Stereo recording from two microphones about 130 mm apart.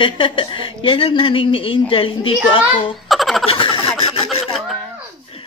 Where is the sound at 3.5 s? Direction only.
40° left (ahead or behind).